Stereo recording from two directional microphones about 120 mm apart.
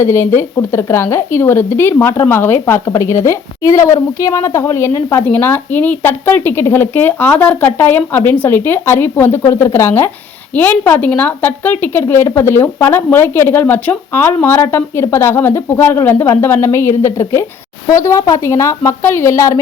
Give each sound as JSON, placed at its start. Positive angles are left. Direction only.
{"t": 0.0, "sound": "a woman's voice", "side_deg": 20}